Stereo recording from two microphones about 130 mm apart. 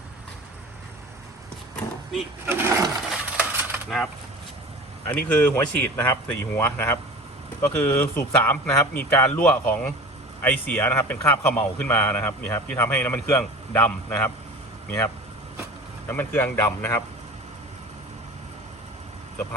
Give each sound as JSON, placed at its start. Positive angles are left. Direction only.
{"t": 2.5, "sound": "speech", "side_deg": -20}
{"t": 3.3, "sound": "a sound", "side_deg": -15}
{"t": 3.8, "sound": "speech", "side_deg": 0}
{"t": 5.0, "sound": "a man's voice", "side_deg": 15}
{"t": 16.0, "sound": "a man's voice", "side_deg": 15}